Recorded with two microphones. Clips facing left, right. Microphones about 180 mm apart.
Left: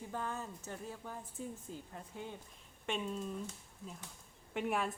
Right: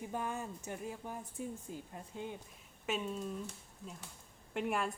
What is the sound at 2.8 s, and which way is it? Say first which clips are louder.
Speech: right 1 dB; 5° right (ahead or behind).